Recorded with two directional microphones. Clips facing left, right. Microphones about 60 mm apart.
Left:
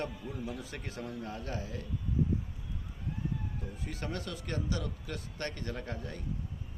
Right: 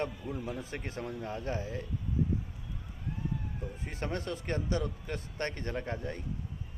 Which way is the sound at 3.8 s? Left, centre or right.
Right.